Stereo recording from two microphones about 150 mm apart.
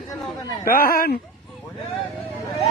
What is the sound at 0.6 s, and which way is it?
Speech, 70° left (ahead or behind).